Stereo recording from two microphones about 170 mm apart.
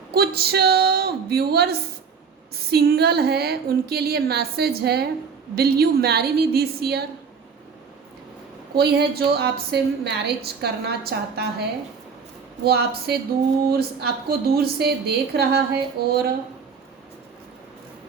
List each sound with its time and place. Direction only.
0.1 s a woman's voice: 65° right (ahead or behind)
8.7 s a woman's voice: 70° right (ahead or behind)
12.6 s a woman's voice: 65° right (ahead or behind)